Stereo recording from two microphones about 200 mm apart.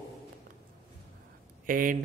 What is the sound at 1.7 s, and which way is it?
Speech, 45° right (ahead or behind).